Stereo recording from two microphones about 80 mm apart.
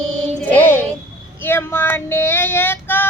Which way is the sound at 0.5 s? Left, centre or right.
Left.